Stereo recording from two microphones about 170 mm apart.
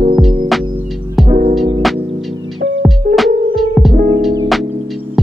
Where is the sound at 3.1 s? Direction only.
Centre (ahead or behind).